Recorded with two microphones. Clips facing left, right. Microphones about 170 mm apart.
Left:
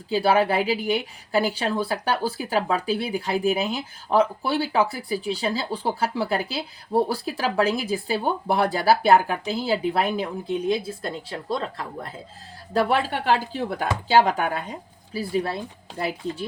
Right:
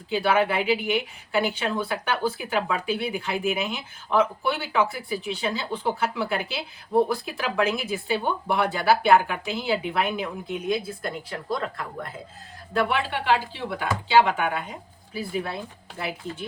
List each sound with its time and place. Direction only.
0.1 s speech: 35° left (ahead or behind)
12.7 s speech: 40° left (ahead or behind)